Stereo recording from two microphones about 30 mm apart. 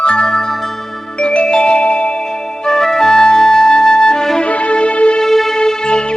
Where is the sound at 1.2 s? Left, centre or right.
Left.